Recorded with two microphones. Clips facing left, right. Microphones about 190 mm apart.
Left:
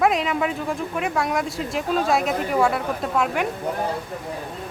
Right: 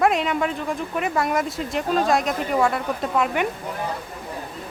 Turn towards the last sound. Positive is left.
turn(degrees=0)  # may be behind; listen again after turning